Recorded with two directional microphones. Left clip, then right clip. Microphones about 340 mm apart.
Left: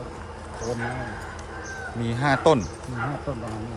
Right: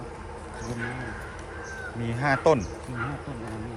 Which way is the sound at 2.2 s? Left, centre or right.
Centre.